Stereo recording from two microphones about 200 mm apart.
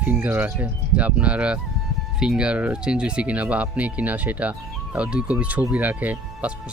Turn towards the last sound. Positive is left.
turn(degrees=-10)  # may be behind; listen again after turning